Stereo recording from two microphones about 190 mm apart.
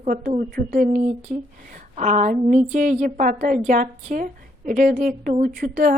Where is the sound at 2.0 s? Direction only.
40° right (ahead or behind).